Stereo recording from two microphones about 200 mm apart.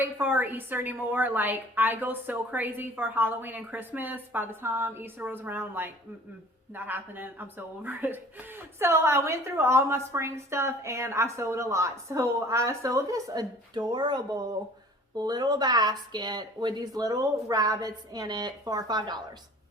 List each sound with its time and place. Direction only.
0.0 s speech: 10° right (ahead or behind)